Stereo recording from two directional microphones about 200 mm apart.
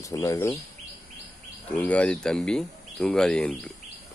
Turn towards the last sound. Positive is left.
turn(degrees=5)  # may be behind; listen again after turning